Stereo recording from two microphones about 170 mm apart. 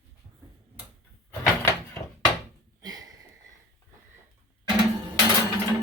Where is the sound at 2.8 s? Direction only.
20° right (ahead or behind).